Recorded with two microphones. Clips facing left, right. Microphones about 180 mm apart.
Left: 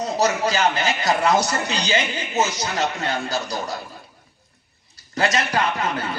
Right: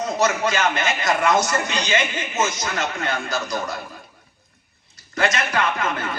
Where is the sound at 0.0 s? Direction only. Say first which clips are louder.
Even; 35° left (ahead or behind).